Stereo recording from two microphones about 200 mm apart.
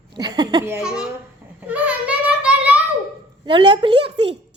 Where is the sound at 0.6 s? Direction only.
5° right (ahead or behind).